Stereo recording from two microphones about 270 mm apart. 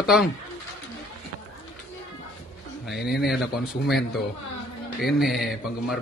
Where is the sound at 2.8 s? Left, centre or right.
Centre.